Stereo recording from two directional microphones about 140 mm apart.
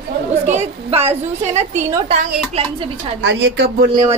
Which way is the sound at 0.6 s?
45° right (ahead or behind).